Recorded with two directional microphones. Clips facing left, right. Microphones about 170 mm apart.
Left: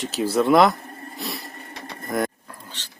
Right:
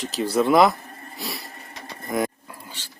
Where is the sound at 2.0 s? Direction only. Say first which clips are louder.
Even; centre (ahead or behind).